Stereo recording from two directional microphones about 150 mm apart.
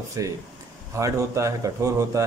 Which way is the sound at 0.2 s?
20° right (ahead or behind).